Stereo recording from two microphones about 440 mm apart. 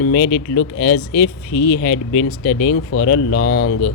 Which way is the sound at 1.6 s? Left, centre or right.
Left.